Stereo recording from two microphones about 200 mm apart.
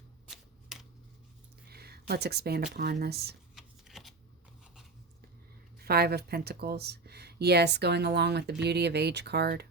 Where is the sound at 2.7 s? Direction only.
55° right (ahead or behind).